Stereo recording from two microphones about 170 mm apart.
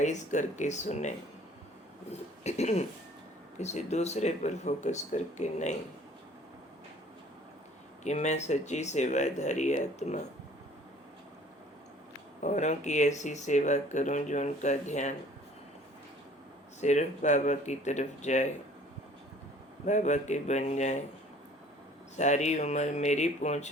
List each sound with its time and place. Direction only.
0.0 s speech: 45° left (ahead or behind)
2.4 s speech: 40° left (ahead or behind)
8.0 s speech: 45° left (ahead or behind)
12.4 s speech: 45° left (ahead or behind)
16.8 s speech: 45° left (ahead or behind)
19.8 s speech: 45° left (ahead or behind)
22.1 s speech: 45° left (ahead or behind)